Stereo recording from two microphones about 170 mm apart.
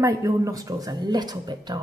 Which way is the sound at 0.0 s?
20° right (ahead or behind).